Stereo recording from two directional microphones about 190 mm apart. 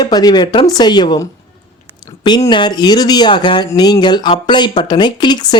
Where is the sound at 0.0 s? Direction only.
20° left (ahead or behind).